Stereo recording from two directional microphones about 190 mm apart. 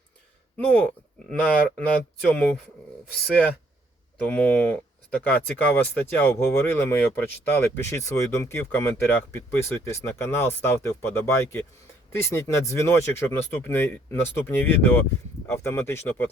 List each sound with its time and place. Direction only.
0.5 s speech: 10° left (ahead or behind)
4.3 s speech: 5° left (ahead or behind)